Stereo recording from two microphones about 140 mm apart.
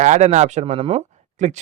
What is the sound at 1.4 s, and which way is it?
Speech, 60° right (ahead or behind).